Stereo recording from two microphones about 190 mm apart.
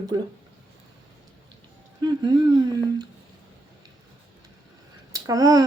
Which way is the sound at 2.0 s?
25° right (ahead or behind).